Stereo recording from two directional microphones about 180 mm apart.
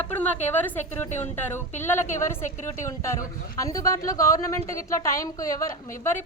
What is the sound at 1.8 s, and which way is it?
Speech, 45° left (ahead or behind).